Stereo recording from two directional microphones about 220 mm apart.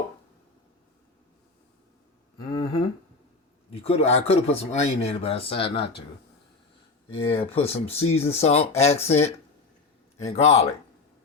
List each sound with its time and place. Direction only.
2.5 s a sound: 20° left (ahead or behind)
3.7 s speech: 25° left (ahead or behind)
7.1 s speech: 25° left (ahead or behind)